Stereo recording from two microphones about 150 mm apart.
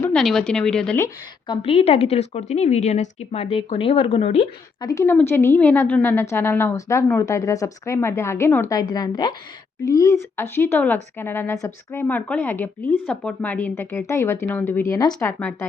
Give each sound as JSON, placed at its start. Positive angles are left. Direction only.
{"t": 0.0, "sound": "a woman's voice", "side_deg": 5}
{"t": 1.5, "sound": "a woman's voice", "side_deg": 40}
{"t": 4.8, "sound": "a woman's voice", "side_deg": 25}
{"t": 8.7, "sound": "a woman's voice", "side_deg": 25}
{"t": 15.4, "sound": "a woman's voice", "side_deg": 10}